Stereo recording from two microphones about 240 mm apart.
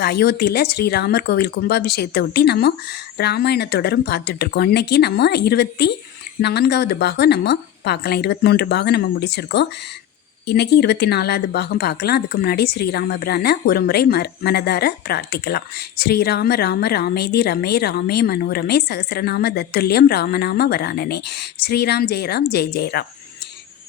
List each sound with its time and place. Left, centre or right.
0.0 s a woman's voice: left